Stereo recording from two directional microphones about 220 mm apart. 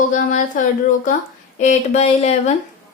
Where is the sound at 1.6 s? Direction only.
30° left (ahead or behind).